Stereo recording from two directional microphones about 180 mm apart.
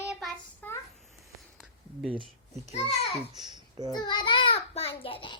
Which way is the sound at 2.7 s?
35° left (ahead or behind).